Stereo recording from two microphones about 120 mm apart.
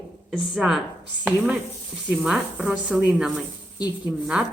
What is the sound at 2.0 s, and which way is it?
Speech, 10° right (ahead or behind).